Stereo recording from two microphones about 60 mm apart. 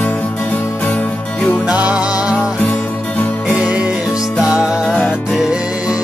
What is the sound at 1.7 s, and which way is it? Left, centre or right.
Music, right.